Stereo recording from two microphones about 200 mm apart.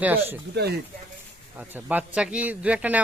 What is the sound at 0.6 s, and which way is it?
Speech, 55° right (ahead or behind).